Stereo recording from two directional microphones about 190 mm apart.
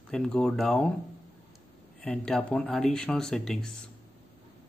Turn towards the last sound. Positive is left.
turn(degrees=0)  # may be behind; listen again after turning